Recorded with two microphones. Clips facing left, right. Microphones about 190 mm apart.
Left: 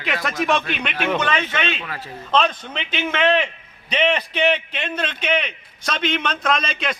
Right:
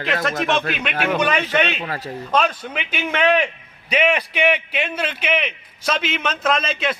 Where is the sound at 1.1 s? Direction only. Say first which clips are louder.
Right 2 dB; 10° right (ahead or behind).